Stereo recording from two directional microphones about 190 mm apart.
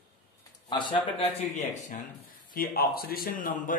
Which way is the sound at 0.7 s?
25° left (ahead or behind).